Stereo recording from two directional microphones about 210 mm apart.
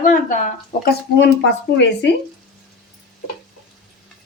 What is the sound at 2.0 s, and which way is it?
Speech, 55° left (ahead or behind).